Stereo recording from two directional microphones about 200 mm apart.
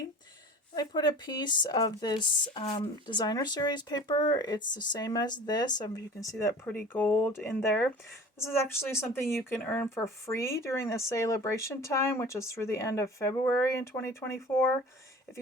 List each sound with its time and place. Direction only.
0.7 s speech: 20° left (ahead or behind)